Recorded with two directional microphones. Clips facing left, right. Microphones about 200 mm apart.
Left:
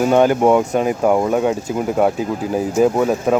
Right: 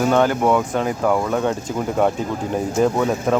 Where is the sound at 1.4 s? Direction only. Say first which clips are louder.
Left 3 dB; 10° left (ahead or behind).